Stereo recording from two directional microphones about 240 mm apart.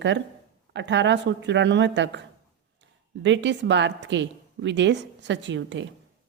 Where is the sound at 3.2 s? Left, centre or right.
Right.